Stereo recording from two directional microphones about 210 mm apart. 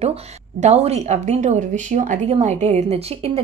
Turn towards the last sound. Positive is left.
turn(degrees=-30)  # may be behind; listen again after turning